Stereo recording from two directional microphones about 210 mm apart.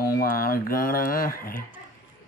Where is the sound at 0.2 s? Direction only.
45° left (ahead or behind).